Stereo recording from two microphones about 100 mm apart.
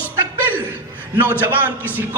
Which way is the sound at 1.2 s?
20° right (ahead or behind).